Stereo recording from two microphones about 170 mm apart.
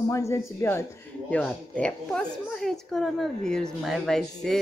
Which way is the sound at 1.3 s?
5° left (ahead or behind).